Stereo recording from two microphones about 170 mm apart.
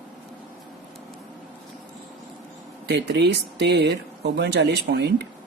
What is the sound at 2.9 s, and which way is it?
Speech, 80° right.